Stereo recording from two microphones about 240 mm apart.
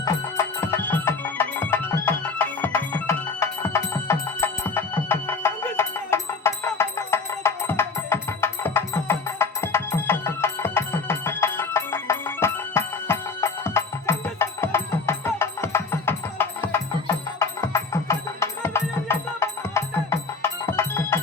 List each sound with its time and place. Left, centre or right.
0.0 s music: centre